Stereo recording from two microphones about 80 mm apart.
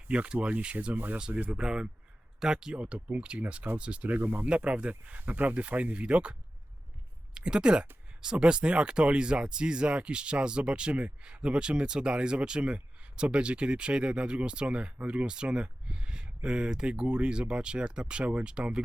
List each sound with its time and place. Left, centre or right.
0.1 s speech: centre
7.3 s speech: centre